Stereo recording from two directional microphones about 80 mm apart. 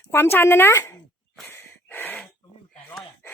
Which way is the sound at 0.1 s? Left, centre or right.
Left.